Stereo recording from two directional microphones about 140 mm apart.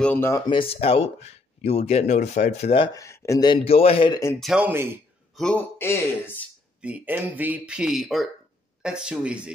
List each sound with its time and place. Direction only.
0.0 s speech: 15° left (ahead or behind)
0.5 s speech: 40° left (ahead or behind)
2.9 s speech: 20° left (ahead or behind)
3.6 s speech: 45° left (ahead or behind)
4.4 s speech: centre (ahead or behind)
4.6 s speech: 15° right (ahead or behind)
5.3 s speech: 5° left (ahead or behind)
6.8 s speech: 10° right (ahead or behind)